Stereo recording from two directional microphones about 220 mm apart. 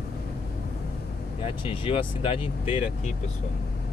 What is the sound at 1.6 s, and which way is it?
Speech, 25° left (ahead or behind).